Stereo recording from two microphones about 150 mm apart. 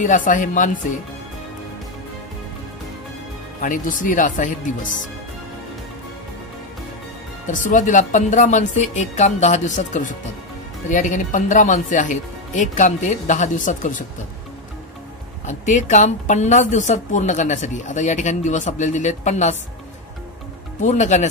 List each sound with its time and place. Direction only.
0.0 s speech: 60° left (ahead or behind)
3.6 s speech: 65° left (ahead or behind)
7.4 s speech: 60° left (ahead or behind)
15.4 s speech: 55° left (ahead or behind)
20.8 s speech: 50° left (ahead or behind)